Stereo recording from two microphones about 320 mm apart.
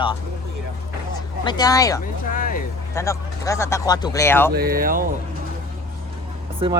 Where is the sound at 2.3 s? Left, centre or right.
Left.